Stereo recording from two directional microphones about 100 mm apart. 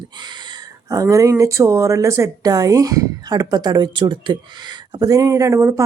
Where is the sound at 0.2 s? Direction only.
50° right (ahead or behind).